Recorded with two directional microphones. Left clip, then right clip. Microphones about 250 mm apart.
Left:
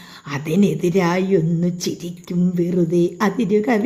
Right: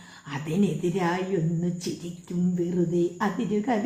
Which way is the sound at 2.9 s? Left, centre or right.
Left.